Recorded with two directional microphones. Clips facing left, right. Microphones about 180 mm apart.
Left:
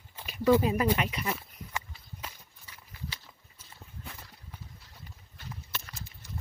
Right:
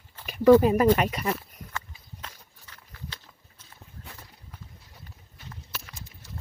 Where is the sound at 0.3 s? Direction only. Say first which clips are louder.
Right 7 dB; 55° right (ahead or behind).